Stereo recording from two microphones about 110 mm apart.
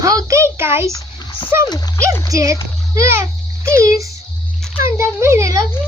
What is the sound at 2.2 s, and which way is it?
A child's voice, 30° right (ahead or behind).